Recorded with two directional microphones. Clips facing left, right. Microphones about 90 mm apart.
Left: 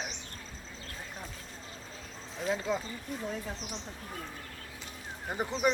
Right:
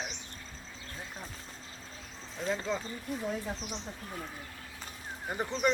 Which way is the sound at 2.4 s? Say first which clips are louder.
Left 1 dB; 5° left (ahead or behind).